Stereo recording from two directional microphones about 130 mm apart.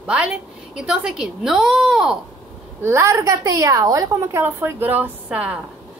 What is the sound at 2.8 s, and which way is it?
A woman's voice, 20° right (ahead or behind).